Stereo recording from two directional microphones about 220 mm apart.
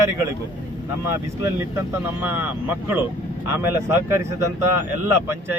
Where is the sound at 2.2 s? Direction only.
10° right (ahead or behind).